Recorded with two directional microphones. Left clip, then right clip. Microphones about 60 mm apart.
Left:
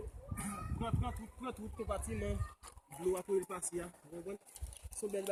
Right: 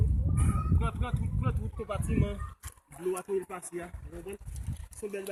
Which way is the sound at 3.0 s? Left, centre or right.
Right.